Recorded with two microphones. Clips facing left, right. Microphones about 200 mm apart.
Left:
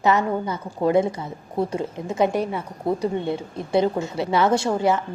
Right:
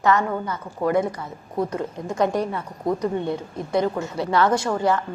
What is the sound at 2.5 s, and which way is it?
Speech, 10° left (ahead or behind).